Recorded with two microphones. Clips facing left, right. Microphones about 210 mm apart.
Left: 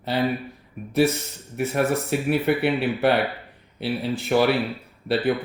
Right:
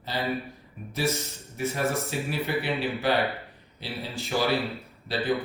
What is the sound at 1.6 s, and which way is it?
Speech, 60° left (ahead or behind).